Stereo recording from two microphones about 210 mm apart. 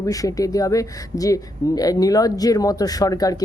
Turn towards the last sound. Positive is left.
turn(degrees=15)  # may be behind; listen again after turning